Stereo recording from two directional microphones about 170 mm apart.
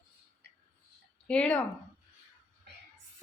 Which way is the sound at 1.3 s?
5° left (ahead or behind).